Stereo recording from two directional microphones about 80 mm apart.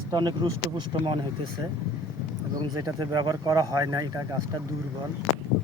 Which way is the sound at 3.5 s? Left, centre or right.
Right.